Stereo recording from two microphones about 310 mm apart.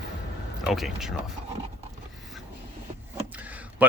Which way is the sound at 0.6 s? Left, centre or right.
Centre.